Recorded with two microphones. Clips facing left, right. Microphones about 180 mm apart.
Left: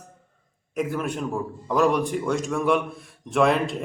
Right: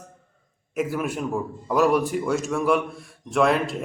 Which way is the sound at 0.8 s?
5° right (ahead or behind).